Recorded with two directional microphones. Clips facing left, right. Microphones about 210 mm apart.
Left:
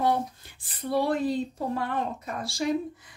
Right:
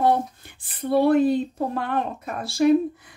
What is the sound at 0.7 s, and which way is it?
Speech, 55° right (ahead or behind).